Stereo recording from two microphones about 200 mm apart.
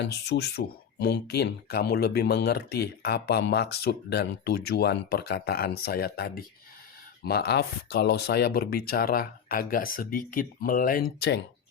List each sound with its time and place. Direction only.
0.0 s speech: 60° left (ahead or behind)